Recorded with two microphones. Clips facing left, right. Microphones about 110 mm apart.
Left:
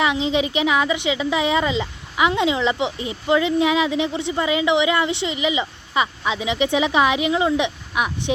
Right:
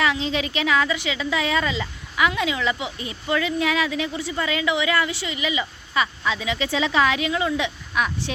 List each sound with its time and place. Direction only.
0.0 s a woman's voice: 20° left (ahead or behind)